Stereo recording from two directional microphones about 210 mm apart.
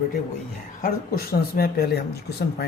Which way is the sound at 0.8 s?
45° left (ahead or behind).